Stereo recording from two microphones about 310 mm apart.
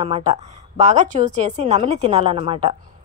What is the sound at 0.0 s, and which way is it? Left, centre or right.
Speech, centre.